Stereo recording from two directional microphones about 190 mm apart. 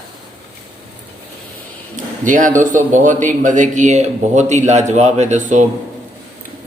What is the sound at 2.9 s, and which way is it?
A man's voice, 40° right (ahead or behind).